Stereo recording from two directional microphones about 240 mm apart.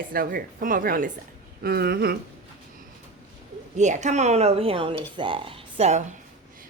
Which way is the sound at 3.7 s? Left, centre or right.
Right.